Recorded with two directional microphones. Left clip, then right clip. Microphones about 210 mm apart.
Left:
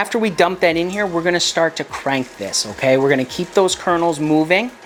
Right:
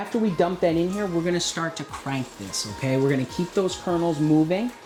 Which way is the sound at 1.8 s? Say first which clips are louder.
Left 11 dB; 90° right.